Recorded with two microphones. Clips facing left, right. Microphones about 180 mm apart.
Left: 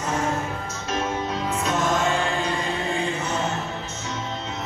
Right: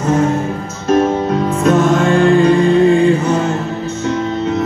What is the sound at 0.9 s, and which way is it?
Music, 55° right (ahead or behind).